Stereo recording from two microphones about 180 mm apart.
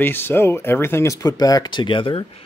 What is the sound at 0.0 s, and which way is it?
Speech, 10° left (ahead or behind).